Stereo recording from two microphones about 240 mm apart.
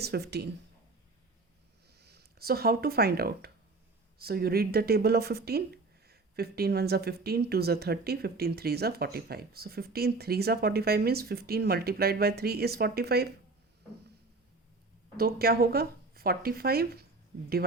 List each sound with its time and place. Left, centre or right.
0.0 s speech: right
2.0 s speech: right
15.1 s speech: right